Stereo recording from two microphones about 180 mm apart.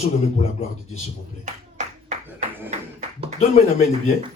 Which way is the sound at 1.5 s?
45° right (ahead or behind).